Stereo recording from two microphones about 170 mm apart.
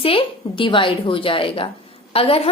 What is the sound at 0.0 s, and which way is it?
A woman's voice, 30° left (ahead or behind).